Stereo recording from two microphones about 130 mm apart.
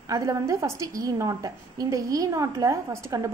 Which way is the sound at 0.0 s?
25° right (ahead or behind).